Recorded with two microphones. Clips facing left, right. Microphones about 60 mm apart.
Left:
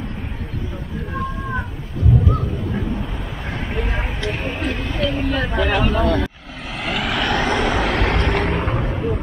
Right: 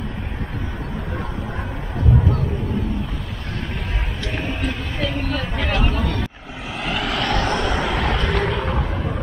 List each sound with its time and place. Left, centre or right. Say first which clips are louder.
3.7 s a sound: left 4 dB; centre
5.5 s speech: left 4 dB; centre
6.7 s vehicle: left 1 dB; centre
7.9 s vehicle: left 2 dB; left